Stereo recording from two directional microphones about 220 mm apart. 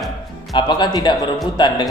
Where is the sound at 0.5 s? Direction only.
20° left (ahead or behind).